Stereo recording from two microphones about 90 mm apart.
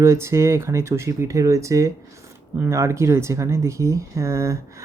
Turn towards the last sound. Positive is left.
turn(degrees=-35)  # may be behind; listen again after turning